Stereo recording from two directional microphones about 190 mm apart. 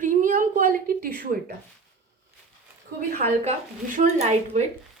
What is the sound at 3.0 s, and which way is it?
Speech, 35° right (ahead or behind).